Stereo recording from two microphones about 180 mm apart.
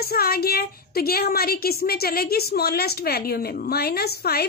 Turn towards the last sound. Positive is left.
turn(degrees=60)  # may be behind; listen again after turning